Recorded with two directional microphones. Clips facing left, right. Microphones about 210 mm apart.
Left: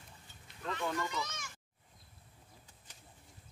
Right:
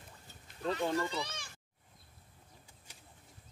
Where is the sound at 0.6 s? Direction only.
35° right (ahead or behind).